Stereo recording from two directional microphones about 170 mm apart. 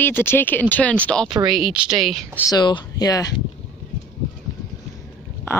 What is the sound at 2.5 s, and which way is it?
Speech, 25° left (ahead or behind).